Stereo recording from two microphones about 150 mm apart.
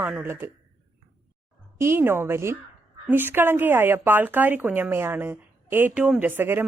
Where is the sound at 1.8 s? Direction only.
15° right (ahead or behind).